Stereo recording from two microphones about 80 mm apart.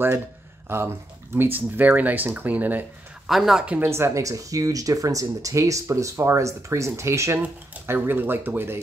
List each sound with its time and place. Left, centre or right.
0.7 s speech: right
3.3 s speech: centre
3.8 s speech: right